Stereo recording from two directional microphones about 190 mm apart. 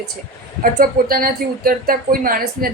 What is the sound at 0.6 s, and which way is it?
Speech, 50° right (ahead or behind).